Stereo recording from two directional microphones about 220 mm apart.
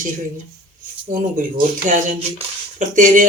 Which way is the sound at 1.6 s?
35° right (ahead or behind).